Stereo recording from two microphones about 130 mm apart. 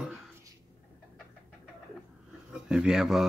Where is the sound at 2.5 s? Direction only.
5° right (ahead or behind).